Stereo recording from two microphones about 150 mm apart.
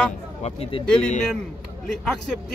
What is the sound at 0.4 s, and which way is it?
Speech, 40° left (ahead or behind).